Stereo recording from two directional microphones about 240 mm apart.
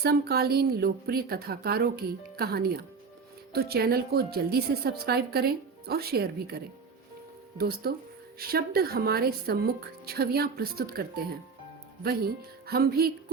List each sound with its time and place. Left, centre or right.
0.0 s a woman's voice: right
7.6 s a woman's voice: right